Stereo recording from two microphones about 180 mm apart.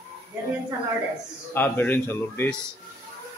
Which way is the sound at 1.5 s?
10° left (ahead or behind).